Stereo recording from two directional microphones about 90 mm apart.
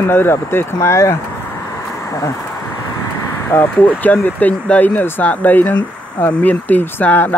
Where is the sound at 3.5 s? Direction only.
25° left (ahead or behind).